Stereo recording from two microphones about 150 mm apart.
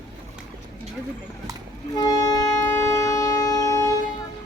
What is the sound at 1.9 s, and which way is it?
Wind instrument, 25° left (ahead or behind).